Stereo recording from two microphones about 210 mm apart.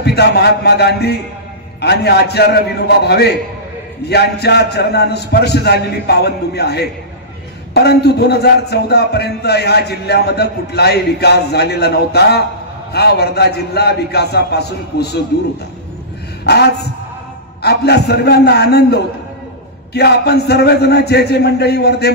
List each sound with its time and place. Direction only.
0.0 s a man's voice: 50° left (ahead or behind)
16.4 s a man's voice: 50° left (ahead or behind)